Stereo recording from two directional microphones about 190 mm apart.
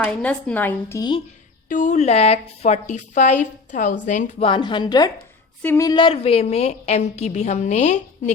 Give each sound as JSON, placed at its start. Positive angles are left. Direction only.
{"t": 0.0, "sound": "speech", "side_deg": 5}
{"t": 1.7, "sound": "a woman's voice", "side_deg": 40}